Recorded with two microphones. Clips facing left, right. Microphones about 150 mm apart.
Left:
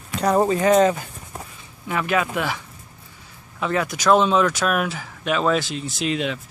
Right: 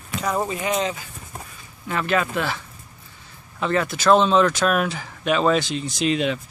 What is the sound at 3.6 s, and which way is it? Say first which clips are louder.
Speech: right 1 dB; 10° left (ahead or behind).